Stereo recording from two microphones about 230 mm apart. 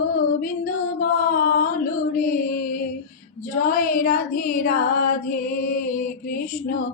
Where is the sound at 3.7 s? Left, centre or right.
Left.